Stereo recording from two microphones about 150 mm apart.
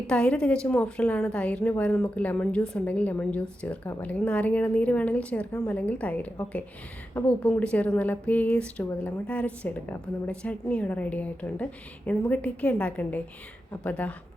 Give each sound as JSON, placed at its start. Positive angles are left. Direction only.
{"t": 0.1, "sound": "a woman's voice", "side_deg": 10}